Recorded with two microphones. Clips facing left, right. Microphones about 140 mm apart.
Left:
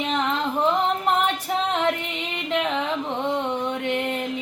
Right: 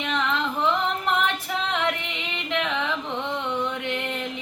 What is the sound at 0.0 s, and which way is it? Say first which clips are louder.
Female singing: left 2 dB; 35° left (ahead or behind).